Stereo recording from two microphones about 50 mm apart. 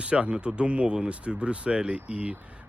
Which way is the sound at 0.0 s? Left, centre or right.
Right.